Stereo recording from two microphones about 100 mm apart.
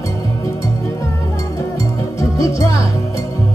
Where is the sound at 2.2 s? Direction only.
35° left (ahead or behind).